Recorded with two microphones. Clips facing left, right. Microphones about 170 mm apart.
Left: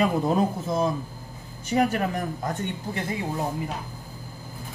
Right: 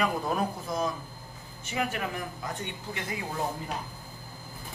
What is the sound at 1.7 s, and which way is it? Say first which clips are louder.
Speech: left 8 dB; 40° left (ahead or behind).